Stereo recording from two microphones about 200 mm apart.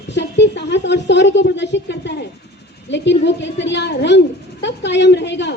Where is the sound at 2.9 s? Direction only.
60° left (ahead or behind).